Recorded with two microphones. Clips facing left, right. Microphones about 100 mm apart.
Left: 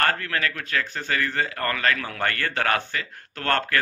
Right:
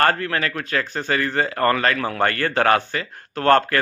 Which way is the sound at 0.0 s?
35° right (ahead or behind).